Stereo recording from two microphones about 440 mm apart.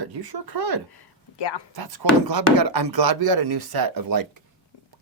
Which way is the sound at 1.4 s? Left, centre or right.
Left.